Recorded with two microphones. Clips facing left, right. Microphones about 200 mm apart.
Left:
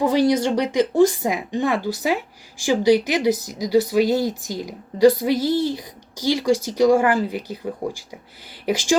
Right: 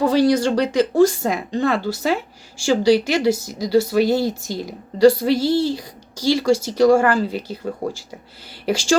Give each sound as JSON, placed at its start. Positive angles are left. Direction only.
{"t": 0.0, "sound": "speech", "side_deg": 20}
{"t": 7.8, "sound": "speech", "side_deg": -35}
{"t": 8.6, "sound": "speech", "side_deg": 15}